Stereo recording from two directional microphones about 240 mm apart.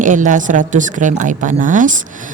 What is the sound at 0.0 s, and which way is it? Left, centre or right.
Speech, right.